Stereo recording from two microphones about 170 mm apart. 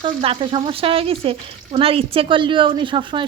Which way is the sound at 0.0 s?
30° right (ahead or behind).